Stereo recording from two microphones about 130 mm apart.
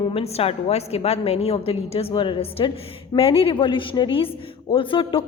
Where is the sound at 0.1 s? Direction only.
50° left (ahead or behind).